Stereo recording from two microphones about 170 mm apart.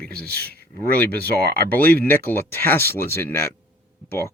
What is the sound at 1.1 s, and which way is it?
Speech, 65° right (ahead or behind).